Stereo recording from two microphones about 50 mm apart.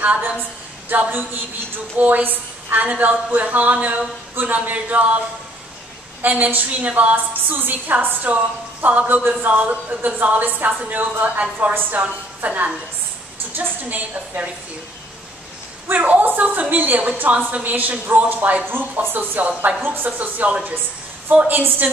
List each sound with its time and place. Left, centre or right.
0.0 s a woman's voice: right
6.2 s a woman's voice: right
12.4 s a woman's voice: right
15.9 s speech: right
20.1 s a woman's voice: right
21.5 s speech: right